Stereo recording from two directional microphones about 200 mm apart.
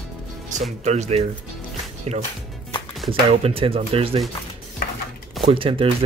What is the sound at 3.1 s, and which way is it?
Speech, 30° right (ahead or behind).